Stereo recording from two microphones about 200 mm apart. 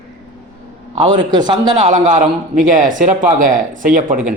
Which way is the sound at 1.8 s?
40° right (ahead or behind).